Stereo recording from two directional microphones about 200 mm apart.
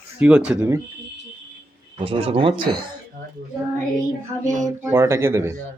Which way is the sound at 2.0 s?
25° right (ahead or behind).